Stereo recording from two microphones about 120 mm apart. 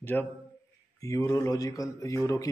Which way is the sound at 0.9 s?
30° left (ahead or behind).